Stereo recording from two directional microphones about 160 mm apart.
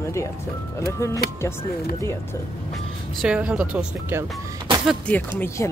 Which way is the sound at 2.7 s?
5° right (ahead or behind).